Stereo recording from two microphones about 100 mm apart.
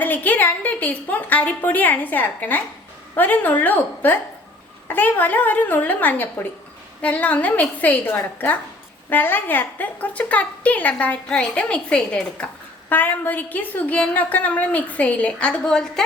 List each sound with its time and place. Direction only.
0.0 s a woman's voice: 20° left (ahead or behind)